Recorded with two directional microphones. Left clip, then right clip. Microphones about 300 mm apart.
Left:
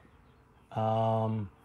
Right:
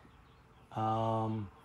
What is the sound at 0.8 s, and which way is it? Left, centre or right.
Mantra, left.